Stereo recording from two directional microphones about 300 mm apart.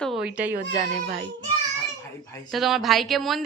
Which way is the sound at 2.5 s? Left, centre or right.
Centre.